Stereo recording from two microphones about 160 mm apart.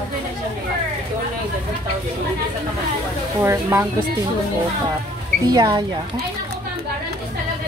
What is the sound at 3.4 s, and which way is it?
Speech, 15° right (ahead or behind).